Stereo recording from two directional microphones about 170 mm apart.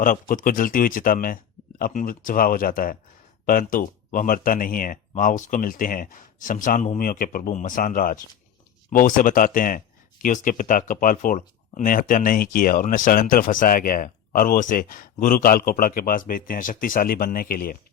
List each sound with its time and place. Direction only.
0.0 s speech: 55° left (ahead or behind)